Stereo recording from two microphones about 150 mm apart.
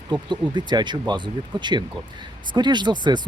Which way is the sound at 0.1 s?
30° right (ahead or behind).